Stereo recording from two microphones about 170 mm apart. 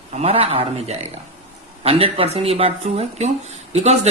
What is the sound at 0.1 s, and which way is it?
Speech, 35° right (ahead or behind).